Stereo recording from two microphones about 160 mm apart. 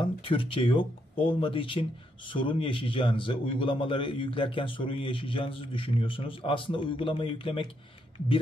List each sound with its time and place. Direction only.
0.0 s speech: 35° left (ahead or behind)